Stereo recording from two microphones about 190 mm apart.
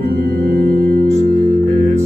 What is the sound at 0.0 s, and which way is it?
Music, 50° right (ahead or behind).